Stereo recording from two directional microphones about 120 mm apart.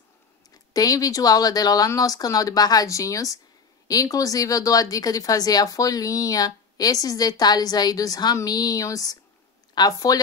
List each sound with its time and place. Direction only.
0.7 s speech: 30° left (ahead or behind)